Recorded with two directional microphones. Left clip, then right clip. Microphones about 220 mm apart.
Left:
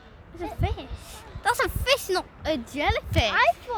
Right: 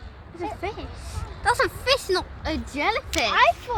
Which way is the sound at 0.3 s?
50° left (ahead or behind).